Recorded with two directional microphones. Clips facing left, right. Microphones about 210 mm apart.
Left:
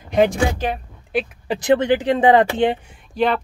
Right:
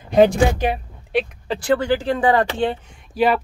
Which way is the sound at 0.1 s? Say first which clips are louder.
Right 3 dB; 35° right (ahead or behind).